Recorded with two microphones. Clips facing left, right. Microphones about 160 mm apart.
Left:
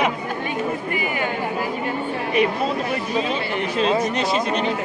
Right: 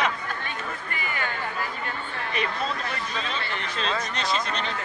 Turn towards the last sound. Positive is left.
turn(degrees=10)  # may be behind; listen again after turning